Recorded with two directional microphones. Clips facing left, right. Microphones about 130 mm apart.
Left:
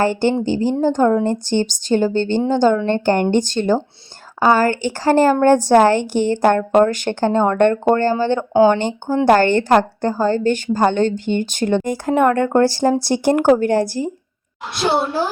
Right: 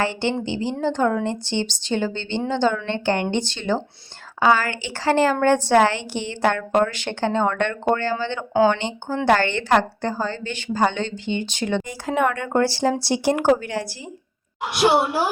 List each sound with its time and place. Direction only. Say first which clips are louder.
0.0 s a woman's voice: left 6 dB; 45° left (ahead or behind)
14.6 s a woman's voice: right 1 dB; 15° right (ahead or behind)